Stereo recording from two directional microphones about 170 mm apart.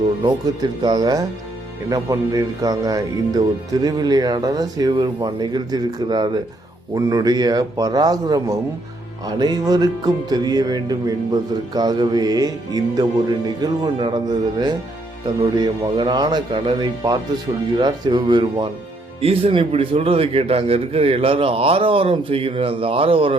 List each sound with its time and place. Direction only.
0.8 s a man's voice: 25° right (ahead or behind)